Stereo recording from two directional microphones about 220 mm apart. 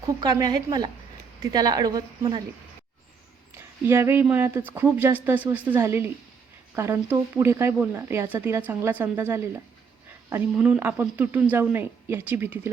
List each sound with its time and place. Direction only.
0.0 s speech: 20° right (ahead or behind)
3.6 s speech: 10° right (ahead or behind)